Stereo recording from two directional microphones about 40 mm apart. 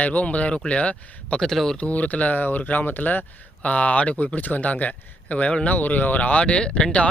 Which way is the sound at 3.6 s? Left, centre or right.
Left.